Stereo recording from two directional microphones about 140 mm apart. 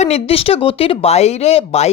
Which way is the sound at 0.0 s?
45° left (ahead or behind).